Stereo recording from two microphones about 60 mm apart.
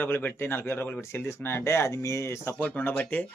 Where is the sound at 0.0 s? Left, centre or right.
Left.